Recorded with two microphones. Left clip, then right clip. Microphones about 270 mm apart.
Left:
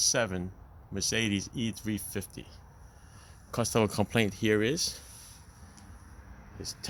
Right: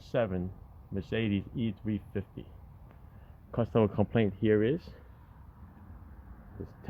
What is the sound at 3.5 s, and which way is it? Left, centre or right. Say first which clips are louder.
Speech: even; centre.